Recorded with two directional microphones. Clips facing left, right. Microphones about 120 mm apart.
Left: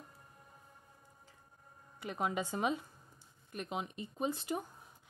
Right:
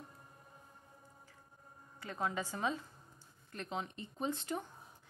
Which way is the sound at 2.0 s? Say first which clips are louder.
Left 2 dB; 15° left (ahead or behind).